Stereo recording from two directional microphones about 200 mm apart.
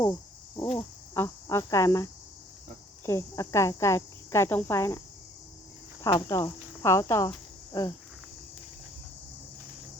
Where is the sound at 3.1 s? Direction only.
15° left (ahead or behind).